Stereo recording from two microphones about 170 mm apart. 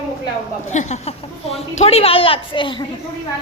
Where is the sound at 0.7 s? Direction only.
45° left (ahead or behind); by 2.8 s 30° left (ahead or behind).